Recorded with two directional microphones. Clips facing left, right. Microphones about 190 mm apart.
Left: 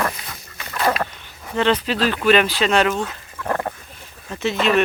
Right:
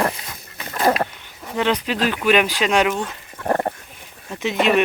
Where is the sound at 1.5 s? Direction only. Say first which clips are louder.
Left 2 dB; 10° right (ahead or behind).